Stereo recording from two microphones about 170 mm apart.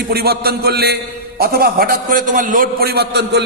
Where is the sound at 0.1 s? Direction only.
65° right (ahead or behind).